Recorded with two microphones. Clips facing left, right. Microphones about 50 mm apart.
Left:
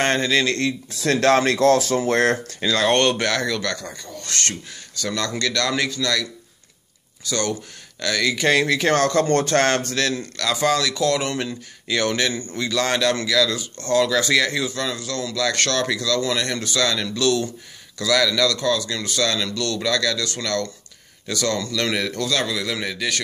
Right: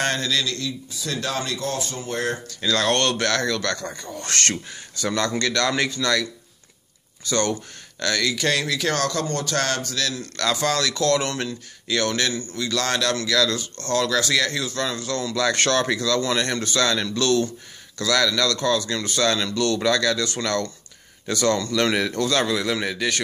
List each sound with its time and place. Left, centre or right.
0.0 s speech: left
0.5 s speech: left
0.8 s speech: left
2.6 s speech: centre
4.3 s speech: right
4.6 s a man's voice: centre
7.2 s speech: centre
8.3 s speech: centre
9.2 s speech: left
10.5 s speech: centre
13.3 s speech: centre
14.8 s a man's voice: centre